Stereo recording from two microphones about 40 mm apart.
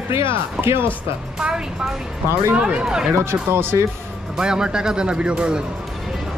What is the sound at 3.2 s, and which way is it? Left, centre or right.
Speech, right.